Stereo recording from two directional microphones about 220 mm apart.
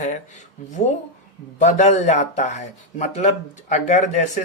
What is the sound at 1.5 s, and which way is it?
Speech, 30° left (ahead or behind).